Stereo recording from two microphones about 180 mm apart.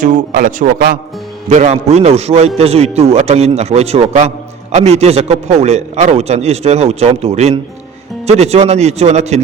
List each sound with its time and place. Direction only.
0.0 s a man's voice: 50° right (ahead or behind)
1.5 s a man's voice: 40° right (ahead or behind)